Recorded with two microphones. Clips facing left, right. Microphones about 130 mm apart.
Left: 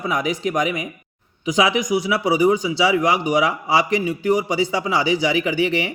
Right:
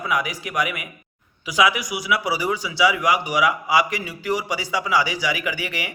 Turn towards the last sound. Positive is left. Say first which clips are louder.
# left 8 dB
turn(degrees=25)  # may be behind; listen again after turning